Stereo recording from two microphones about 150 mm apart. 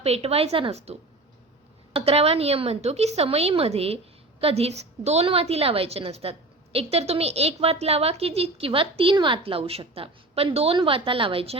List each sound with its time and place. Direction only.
0.0 s a woman's voice: 45° right (ahead or behind)